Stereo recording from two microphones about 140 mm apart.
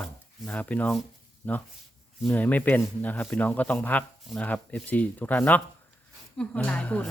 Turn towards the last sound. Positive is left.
turn(degrees=10)  # may be behind; listen again after turning